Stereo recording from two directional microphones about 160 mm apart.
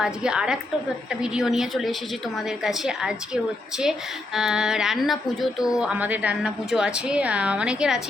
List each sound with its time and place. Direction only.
0.0 s speech: 5° right (ahead or behind)